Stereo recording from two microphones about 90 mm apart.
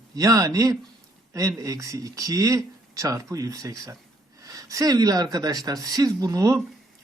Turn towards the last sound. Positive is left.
turn(degrees=-40)  # may be behind; listen again after turning